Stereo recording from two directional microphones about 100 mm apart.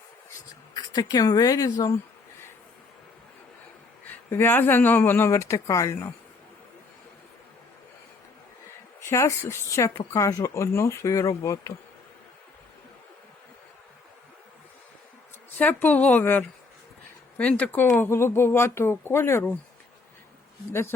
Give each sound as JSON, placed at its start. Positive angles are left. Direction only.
{"t": 0.7, "sound": "speech", "side_deg": 45}
{"t": 4.3, "sound": "speech", "side_deg": 20}
{"t": 9.0, "sound": "speech", "side_deg": 30}
{"t": 15.5, "sound": "speech", "side_deg": 15}
{"t": 17.6, "sound": "speech", "side_deg": 15}